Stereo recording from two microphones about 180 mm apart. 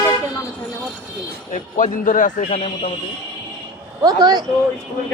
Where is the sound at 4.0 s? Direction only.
20° right (ahead or behind).